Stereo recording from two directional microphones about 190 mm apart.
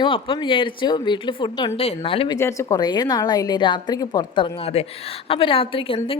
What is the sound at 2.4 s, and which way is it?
A woman's voice, 15° left (ahead or behind).